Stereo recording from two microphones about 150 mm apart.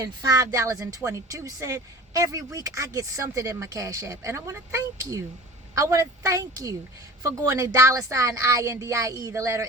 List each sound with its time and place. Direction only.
0.0 s speech: 25° right (ahead or behind)